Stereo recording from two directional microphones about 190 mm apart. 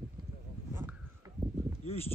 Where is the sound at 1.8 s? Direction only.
30° left (ahead or behind).